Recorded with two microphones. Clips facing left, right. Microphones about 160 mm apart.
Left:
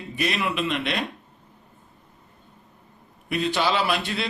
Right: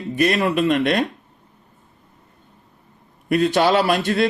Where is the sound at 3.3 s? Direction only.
50° right (ahead or behind).